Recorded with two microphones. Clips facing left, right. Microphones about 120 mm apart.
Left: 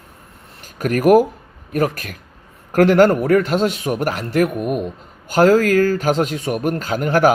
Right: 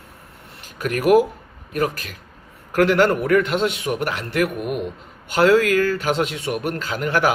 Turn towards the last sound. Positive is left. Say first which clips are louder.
# left 5 dB
turn(degrees=45)  # may be behind; listen again after turning